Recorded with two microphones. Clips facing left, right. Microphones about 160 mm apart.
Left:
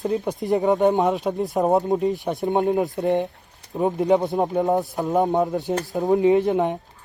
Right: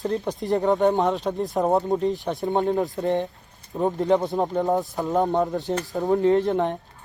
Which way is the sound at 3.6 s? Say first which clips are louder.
Left 2 dB; 75° left (ahead or behind).